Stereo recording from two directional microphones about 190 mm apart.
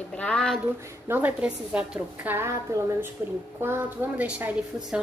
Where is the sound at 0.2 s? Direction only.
5° left (ahead or behind).